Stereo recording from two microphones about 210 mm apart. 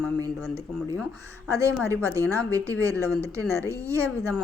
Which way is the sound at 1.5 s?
15° right (ahead or behind).